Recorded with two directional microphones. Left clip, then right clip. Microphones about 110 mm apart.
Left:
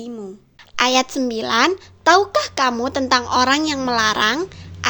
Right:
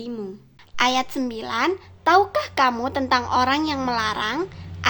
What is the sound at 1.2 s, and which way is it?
Speech, 50° left (ahead or behind).